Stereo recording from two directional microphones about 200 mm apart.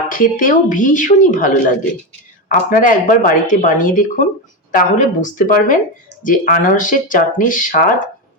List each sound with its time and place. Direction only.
0.1 s speech: 40° left (ahead or behind)